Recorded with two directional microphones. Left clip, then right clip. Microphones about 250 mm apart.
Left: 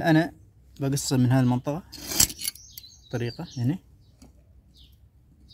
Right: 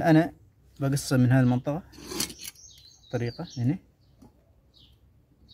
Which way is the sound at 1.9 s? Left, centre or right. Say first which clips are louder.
Left 8 dB; left.